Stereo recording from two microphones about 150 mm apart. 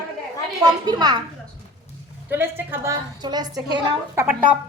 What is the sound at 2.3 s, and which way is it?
A woman's voice, 15° right (ahead or behind).